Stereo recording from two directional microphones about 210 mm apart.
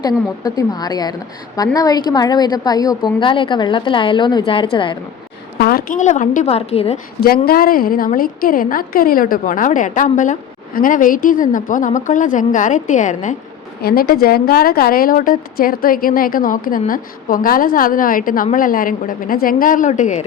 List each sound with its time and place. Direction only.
0.4 s a woman's voice: 20° left (ahead or behind)
5.5 s a woman's voice: 45° left (ahead or behind); by 6.9 s 30° left (ahead or behind)
7.3 s a woman's voice: 45° left (ahead or behind)